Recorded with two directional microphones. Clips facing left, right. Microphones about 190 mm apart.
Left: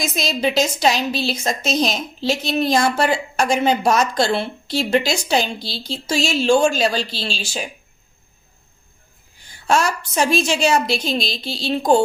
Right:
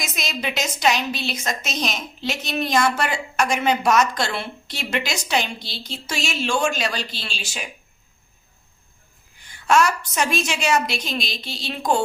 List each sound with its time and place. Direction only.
0.0 s a woman's voice: 30° left (ahead or behind)
9.5 s a woman's voice: 30° left (ahead or behind)